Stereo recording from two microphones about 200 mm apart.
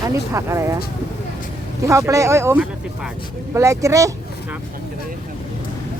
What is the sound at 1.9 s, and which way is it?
Speech, 15° right (ahead or behind).